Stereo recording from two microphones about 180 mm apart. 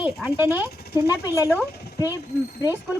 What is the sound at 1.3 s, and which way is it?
Speech, 15° left (ahead or behind).